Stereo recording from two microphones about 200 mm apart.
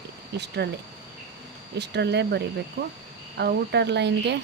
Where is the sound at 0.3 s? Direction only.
55° right (ahead or behind).